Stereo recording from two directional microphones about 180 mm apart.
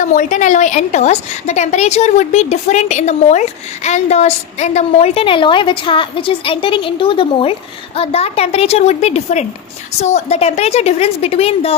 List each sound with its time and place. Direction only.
0.0 s a woman's voice: 45° left (ahead or behind)